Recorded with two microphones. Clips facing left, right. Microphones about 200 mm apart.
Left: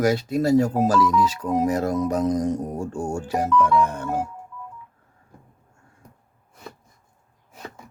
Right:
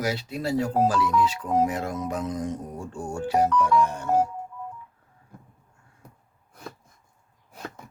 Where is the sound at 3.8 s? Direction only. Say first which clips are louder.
Right 2 dB; 55° left (ahead or behind).